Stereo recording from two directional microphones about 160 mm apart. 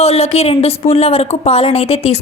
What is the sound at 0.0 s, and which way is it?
Speech, 40° left (ahead or behind).